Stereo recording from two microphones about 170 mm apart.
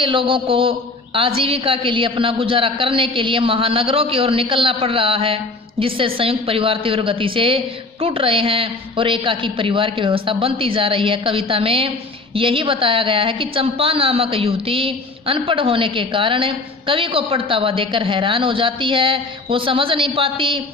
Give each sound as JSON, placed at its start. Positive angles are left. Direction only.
{"t": 0.0, "sound": "a woman's voice", "side_deg": -30}